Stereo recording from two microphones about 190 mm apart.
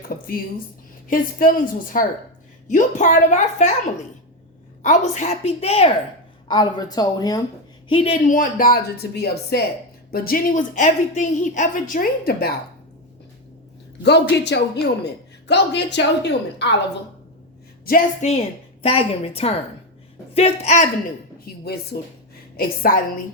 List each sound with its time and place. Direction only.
1.0 s a woman's voice: 45° left (ahead or behind)
4.8 s a woman's voice: 40° left (ahead or behind)
14.0 s speech: 65° left (ahead or behind)
17.8 s a woman's voice: 45° left (ahead or behind)
21.4 s a woman's voice: 55° left (ahead or behind)